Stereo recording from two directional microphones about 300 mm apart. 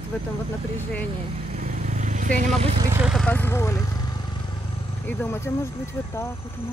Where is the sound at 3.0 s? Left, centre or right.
Centre.